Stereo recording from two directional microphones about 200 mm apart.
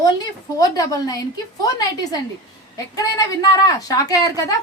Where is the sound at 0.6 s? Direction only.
15° left (ahead or behind).